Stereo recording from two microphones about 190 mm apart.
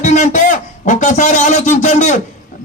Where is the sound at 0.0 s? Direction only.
40° left (ahead or behind).